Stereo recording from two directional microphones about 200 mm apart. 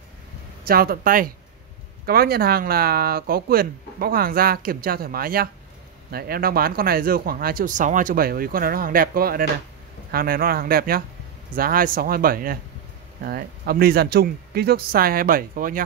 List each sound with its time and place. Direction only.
0.7 s speech: 45° right (ahead or behind)